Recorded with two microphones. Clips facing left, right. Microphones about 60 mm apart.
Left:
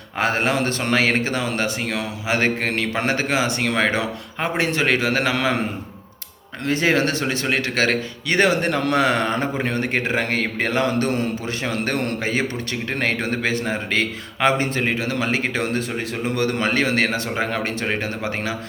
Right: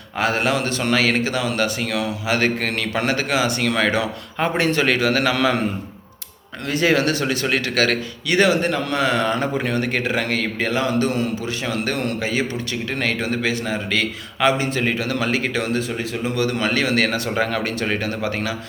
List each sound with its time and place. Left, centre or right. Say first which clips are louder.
0.2 s speech: even; left
6.7 s speech: right 1 dB; left
8.4 s a man's voice: right 1 dB; left
14.8 s speech: right 1 dB; left